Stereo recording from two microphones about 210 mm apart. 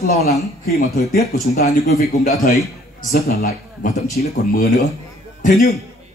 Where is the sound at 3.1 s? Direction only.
45° left (ahead or behind).